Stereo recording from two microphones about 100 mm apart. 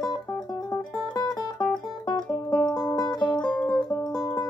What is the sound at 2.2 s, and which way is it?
Music, 5° left (ahead or behind).